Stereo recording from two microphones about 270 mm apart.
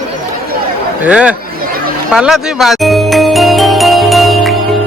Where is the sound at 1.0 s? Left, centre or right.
Centre.